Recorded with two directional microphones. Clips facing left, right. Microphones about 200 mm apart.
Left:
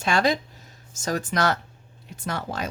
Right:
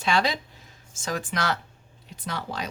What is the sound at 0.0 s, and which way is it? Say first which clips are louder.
Speech: left 3 dB; 45° left (ahead or behind).